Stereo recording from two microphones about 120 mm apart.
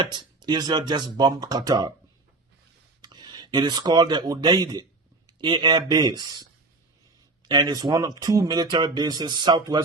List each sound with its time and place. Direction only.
0.0 s speech: 40° right (ahead or behind)
3.0 s speech: 35° right (ahead or behind)